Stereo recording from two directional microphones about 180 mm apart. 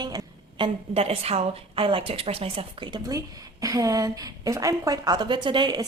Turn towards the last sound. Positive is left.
turn(degrees=-25)  # may be behind; listen again after turning